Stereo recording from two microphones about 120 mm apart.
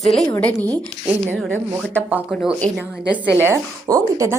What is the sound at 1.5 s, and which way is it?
Speech, 20° right (ahead or behind).